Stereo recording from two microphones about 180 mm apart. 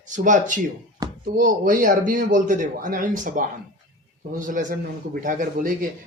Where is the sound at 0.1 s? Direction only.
45° right (ahead or behind).